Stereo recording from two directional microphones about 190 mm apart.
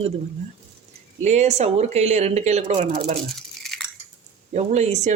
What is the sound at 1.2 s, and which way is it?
Speech, 35° right (ahead or behind).